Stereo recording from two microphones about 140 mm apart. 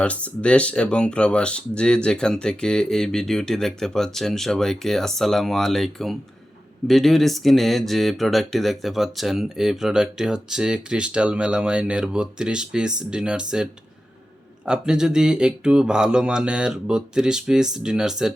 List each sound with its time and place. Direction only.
0.0 s speech: 10° left (ahead or behind)